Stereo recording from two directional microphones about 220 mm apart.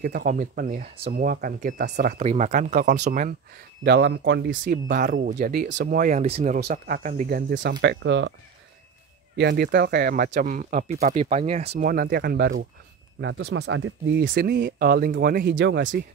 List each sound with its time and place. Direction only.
0.0 s speech: 40° right (ahead or behind)
3.8 s speech: 50° right (ahead or behind)
4.6 s speech: 35° right (ahead or behind)
5.9 s speech: 35° right (ahead or behind); by 8.3 s 55° right (ahead or behind)
9.4 s speech: 50° right (ahead or behind); by 11.9 s 30° right (ahead or behind)
11.9 s speech: 45° right (ahead or behind)
13.2 s speech: 55° right (ahead or behind)
14.1 s speech: 40° right (ahead or behind)